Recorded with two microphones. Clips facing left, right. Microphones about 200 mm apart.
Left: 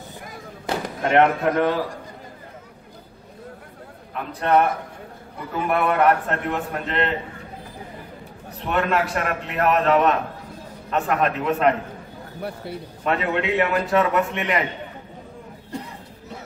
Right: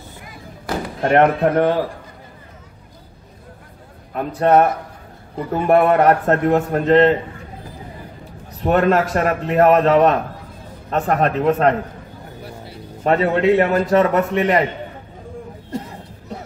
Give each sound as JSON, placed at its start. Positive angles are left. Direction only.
{"t": 1.0, "sound": "speech", "side_deg": -45}
{"t": 4.1, "sound": "a man's voice", "side_deg": -45}
{"t": 8.6, "sound": "a man's voice", "side_deg": -40}
{"t": 13.0, "sound": "a man's voice", "side_deg": -40}